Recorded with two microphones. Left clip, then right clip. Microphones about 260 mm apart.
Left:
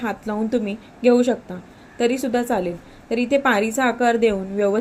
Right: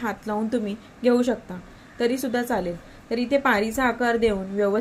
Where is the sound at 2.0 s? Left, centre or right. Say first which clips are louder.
Left 4 dB; centre.